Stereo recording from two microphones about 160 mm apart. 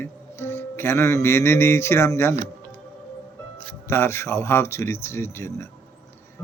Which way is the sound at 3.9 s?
15° left (ahead or behind).